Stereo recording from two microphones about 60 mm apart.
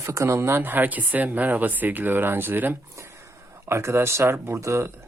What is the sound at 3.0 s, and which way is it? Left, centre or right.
Speech, right.